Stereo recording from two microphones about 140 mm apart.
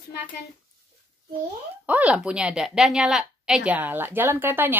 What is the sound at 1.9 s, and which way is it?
A woman's voice, 10° right (ahead or behind).